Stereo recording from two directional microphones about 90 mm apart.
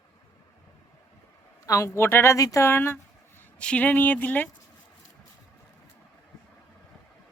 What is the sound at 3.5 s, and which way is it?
Speech, 15° left (ahead or behind).